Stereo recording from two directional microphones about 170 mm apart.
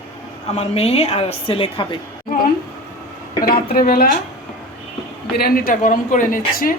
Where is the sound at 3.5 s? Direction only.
60° left (ahead or behind).